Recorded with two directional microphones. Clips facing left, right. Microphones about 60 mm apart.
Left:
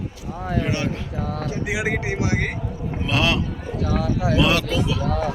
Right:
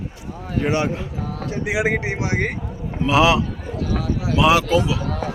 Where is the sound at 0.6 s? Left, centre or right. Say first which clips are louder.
Right 4 dB; right.